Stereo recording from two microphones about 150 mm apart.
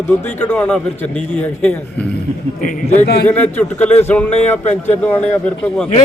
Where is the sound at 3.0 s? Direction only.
90° left.